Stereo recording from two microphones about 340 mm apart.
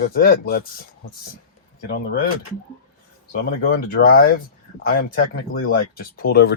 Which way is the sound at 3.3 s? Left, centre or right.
Left.